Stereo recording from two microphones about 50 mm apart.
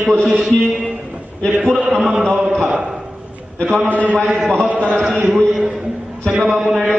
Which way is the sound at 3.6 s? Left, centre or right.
Centre.